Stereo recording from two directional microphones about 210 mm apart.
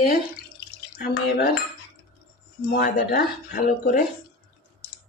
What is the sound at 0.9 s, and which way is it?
Speech, 45° left (ahead or behind).